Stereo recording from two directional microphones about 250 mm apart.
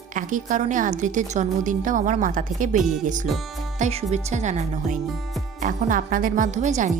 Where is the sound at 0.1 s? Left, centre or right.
Right.